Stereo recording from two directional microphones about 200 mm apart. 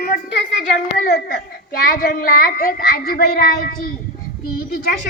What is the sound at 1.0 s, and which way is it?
A child's voice, 45° left (ahead or behind).